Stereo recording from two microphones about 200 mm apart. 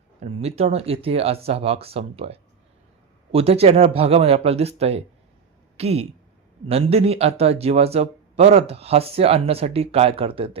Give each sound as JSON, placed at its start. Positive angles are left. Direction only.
{"t": 0.2, "sound": "speech", "side_deg": -30}